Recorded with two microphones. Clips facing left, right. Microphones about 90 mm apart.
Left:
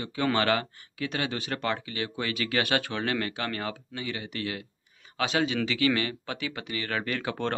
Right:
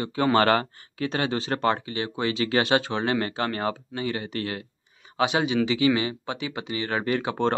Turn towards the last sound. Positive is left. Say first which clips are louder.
# right 6 dB
turn(degrees=-25)  # may be behind; listen again after turning